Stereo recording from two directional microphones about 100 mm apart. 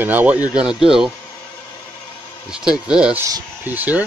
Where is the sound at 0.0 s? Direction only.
20° right (ahead or behind).